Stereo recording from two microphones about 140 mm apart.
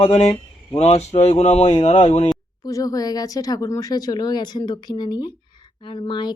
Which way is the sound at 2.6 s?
25° left (ahead or behind).